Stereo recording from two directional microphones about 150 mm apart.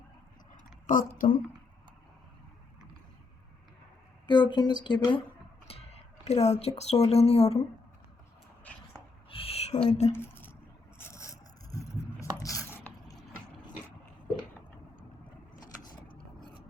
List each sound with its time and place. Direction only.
0.9 s speech: 65° left (ahead or behind)
4.3 s speech: 30° left (ahead or behind)
5.6 s music: 40° left (ahead or behind)
7.1 s a woman's voice: 45° left (ahead or behind)
9.3 s a sound: 40° left (ahead or behind)
10.9 s a sound: 15° left (ahead or behind)
15.6 s vehicle: 25° left (ahead or behind)